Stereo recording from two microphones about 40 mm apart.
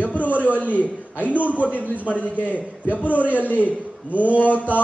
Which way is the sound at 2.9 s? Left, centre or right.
Right.